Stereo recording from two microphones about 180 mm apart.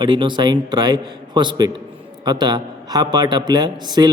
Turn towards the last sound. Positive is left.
turn(degrees=-25)  # may be behind; listen again after turning